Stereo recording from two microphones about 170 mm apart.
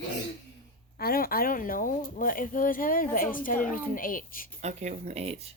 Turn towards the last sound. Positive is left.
turn(degrees=-35)  # may be behind; listen again after turning